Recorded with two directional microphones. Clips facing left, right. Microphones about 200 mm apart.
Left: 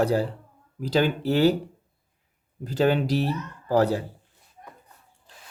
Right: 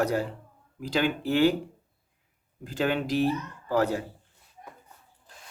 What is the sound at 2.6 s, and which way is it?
Speech, 40° left (ahead or behind).